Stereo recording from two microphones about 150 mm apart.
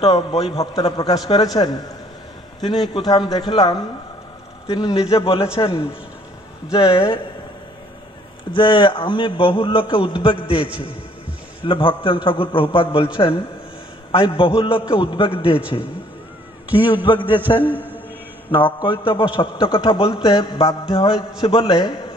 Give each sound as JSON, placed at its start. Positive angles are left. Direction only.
{"t": 0.0, "sound": "a man's voice", "side_deg": 40}
{"t": 0.7, "sound": "a man's voice", "side_deg": 25}
{"t": 8.5, "sound": "a man's voice", "side_deg": 30}
{"t": 11.6, "sound": "a man's voice", "side_deg": 35}
{"t": 16.7, "sound": "a man's voice", "side_deg": 35}
{"t": 17.6, "sound": "a man's voice", "side_deg": -10}
{"t": 18.5, "sound": "a man's voice", "side_deg": 35}